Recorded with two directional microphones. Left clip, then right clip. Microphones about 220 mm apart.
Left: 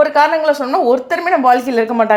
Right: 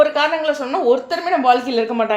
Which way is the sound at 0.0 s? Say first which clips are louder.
Left 4 dB; 35° left (ahead or behind).